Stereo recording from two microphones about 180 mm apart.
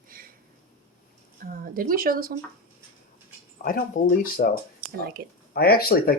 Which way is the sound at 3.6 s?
50° left (ahead or behind).